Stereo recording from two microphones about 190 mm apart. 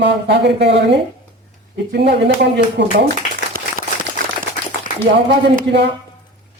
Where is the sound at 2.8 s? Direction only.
65° right (ahead or behind).